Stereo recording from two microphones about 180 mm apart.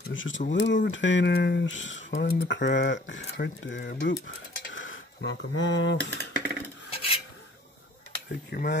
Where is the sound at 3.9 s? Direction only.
65° left (ahead or behind).